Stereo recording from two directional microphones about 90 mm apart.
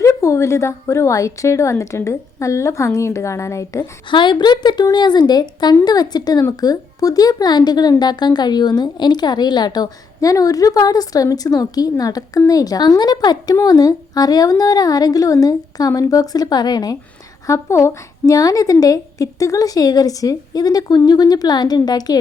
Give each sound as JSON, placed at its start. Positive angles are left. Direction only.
{"t": 0.0, "sound": "a woman's voice", "side_deg": 35}
{"t": 4.1, "sound": "a woman's voice", "side_deg": 60}
{"t": 17.4, "sound": "a woman's voice", "side_deg": 35}